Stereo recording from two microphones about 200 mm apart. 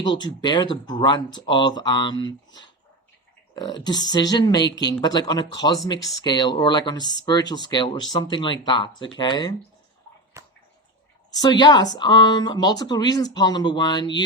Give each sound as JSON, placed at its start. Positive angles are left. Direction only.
{"t": 0.0, "sound": "speech", "side_deg": 20}
{"t": 11.3, "sound": "speech", "side_deg": 20}